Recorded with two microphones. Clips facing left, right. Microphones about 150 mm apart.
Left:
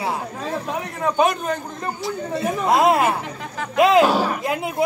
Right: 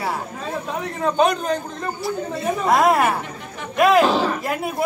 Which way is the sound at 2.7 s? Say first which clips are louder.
Even; 25° left (ahead or behind).